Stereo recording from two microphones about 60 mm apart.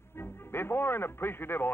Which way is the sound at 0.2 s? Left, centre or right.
Left.